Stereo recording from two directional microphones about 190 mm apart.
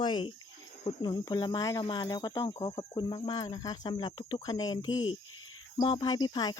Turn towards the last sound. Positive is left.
turn(degrees=20)  # may be behind; listen again after turning